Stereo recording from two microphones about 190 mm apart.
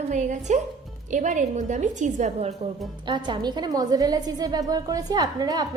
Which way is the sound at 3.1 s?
25° right (ahead or behind).